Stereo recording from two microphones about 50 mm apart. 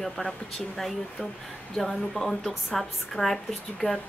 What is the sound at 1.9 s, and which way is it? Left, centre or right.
A woman's voice, centre.